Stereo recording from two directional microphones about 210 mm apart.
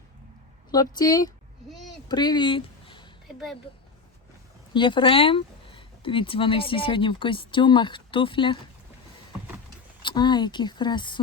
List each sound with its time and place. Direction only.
0.7 s speech: 20° left (ahead or behind)
2.0 s a sound: 20° left (ahead or behind)
4.7 s speech: 25° left (ahead or behind)
10.0 s speech: 20° left (ahead or behind)